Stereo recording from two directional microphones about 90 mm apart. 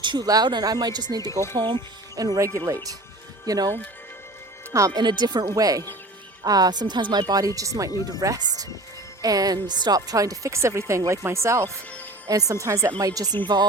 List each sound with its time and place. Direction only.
0.0 s a sound: 60° right (ahead or behind)
0.3 s speech: 50° right (ahead or behind)
1.3 s speech: 30° left (ahead or behind)
1.5 s speech: 60° right (ahead or behind)
2.1 s speech: 45° right (ahead or behind)
4.9 s speech: 55° right (ahead or behind); by 7.9 s 40° right (ahead or behind)
7.9 s speech: 45° left (ahead or behind)
8.2 s speech: 40° right (ahead or behind)